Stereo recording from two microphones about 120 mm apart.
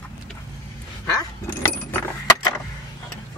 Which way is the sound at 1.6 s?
20° left (ahead or behind).